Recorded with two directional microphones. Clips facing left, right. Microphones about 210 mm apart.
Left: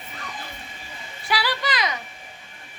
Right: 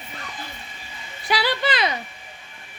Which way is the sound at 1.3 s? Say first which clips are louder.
Right 3 dB; 25° right (ahead or behind).